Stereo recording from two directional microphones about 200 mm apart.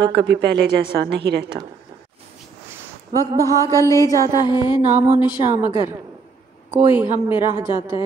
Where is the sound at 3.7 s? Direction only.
15° left (ahead or behind).